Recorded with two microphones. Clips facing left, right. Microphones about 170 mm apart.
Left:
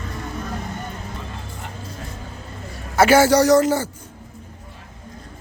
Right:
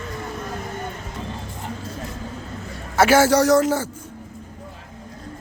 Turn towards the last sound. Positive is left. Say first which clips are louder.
# left 2 dB
turn(degrees=0)  # may be behind; listen again after turning